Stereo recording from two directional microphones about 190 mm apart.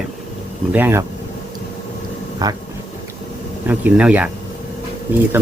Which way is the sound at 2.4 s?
20° right (ahead or behind).